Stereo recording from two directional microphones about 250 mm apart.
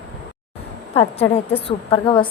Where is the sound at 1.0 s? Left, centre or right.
Left.